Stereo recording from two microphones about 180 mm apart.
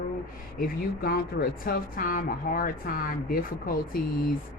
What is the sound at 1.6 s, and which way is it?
Speech, 50° left (ahead or behind).